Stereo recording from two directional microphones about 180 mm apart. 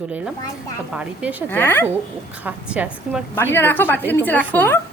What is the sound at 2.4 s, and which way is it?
Speech, 5° right (ahead or behind).